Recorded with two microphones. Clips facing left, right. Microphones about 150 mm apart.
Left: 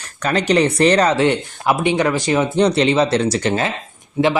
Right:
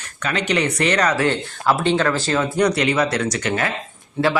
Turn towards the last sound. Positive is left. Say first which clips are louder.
# left 3 dB
turn(degrees=15)  # may be behind; listen again after turning